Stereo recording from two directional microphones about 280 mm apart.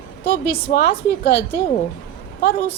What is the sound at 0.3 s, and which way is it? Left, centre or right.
A woman's voice, left.